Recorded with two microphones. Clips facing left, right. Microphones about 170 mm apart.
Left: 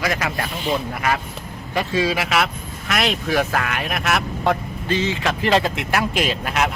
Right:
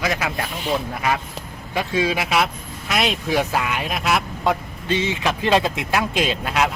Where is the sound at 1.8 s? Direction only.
15° right (ahead or behind).